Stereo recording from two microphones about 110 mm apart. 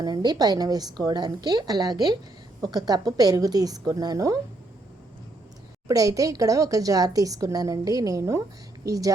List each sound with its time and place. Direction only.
0.0 s a woman's voice: 40° right (ahead or behind)
5.9 s a woman's voice: 30° right (ahead or behind)